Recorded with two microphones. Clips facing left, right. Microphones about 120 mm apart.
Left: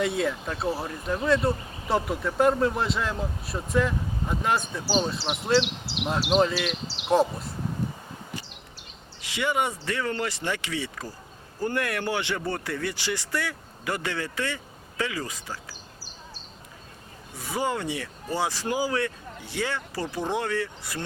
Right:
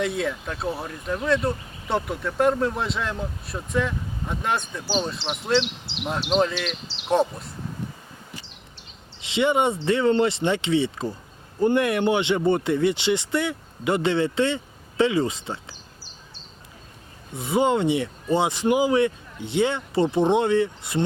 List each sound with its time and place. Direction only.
0.0 s speech: centre (ahead or behind)
9.2 s speech: 25° right (ahead or behind)
17.3 s speech: 25° right (ahead or behind)